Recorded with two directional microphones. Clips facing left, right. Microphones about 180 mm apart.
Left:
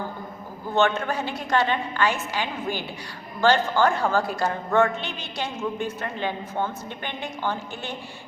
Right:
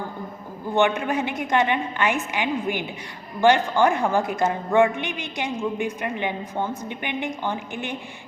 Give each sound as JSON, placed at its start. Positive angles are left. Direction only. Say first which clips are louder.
{"t": 0.8, "sound": "a woman's voice", "louder": "right 1 dB", "side_deg": -15}